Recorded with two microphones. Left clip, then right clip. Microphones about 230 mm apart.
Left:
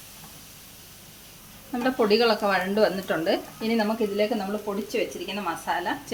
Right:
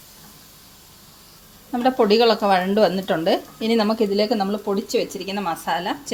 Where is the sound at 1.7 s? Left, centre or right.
Right.